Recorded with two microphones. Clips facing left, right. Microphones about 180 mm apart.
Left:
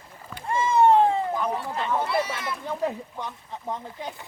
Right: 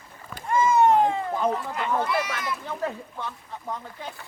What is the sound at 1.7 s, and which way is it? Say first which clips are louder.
Speech: even; 30° left (ahead or behind).